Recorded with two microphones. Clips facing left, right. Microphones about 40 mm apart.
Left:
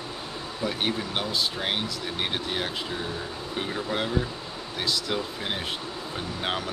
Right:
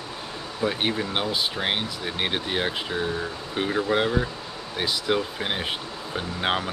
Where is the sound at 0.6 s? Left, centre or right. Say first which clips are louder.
Right 3 dB; centre.